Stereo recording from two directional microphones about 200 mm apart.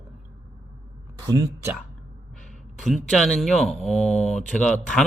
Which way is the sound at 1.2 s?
15° right (ahead or behind).